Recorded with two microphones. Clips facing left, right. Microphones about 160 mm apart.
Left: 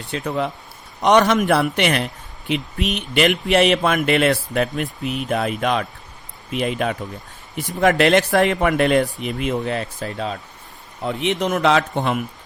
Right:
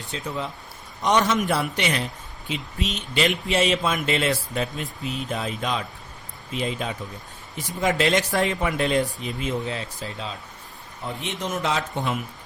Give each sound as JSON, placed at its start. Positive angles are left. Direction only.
{"t": 0.1, "sound": "speech", "side_deg": 65}
{"t": 11.0, "sound": "speech", "side_deg": 75}
{"t": 11.9, "sound": "speech", "side_deg": 60}